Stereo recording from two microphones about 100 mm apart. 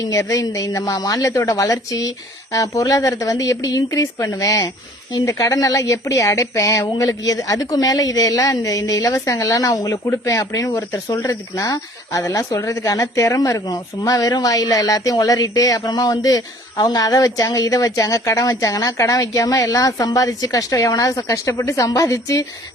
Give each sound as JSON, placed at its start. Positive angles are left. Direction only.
{"t": 0.0, "sound": "speech", "side_deg": 35}